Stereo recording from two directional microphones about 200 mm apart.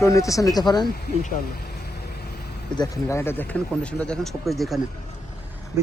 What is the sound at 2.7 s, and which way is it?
Speech, 20° left (ahead or behind).